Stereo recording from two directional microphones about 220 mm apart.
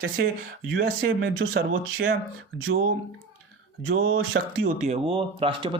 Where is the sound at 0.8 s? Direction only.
55° right (ahead or behind).